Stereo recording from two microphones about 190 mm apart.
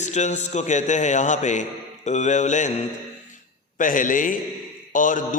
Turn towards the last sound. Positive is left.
turn(degrees=45)  # may be behind; listen again after turning